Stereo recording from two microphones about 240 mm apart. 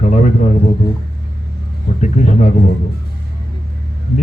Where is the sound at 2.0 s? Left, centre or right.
Left.